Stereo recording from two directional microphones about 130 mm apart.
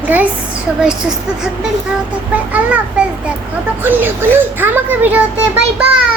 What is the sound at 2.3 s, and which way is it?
Speech, 10° right (ahead or behind).